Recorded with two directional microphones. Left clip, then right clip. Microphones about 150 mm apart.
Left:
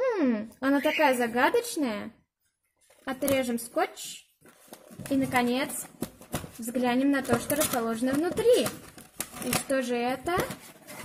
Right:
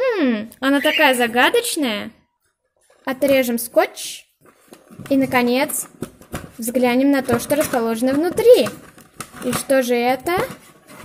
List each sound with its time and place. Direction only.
0.0 s a woman's voice: 5° left (ahead or behind)
3.1 s a woman's voice: 20° right (ahead or behind)
5.1 s a woman's voice: 20° right (ahead or behind)
9.7 s a woman's voice: 15° right (ahead or behind)